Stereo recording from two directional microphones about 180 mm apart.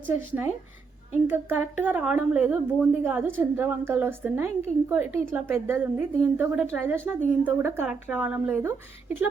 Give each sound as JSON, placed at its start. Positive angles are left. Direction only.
{"t": 0.1, "sound": "speech", "side_deg": -10}